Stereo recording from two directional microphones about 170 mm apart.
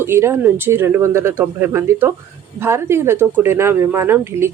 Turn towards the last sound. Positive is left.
turn(degrees=-15)  # may be behind; listen again after turning